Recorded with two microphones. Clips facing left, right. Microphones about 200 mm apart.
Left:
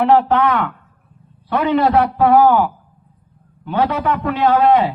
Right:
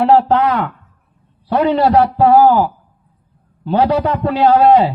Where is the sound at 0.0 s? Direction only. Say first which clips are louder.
Right 2 dB; 35° right (ahead or behind).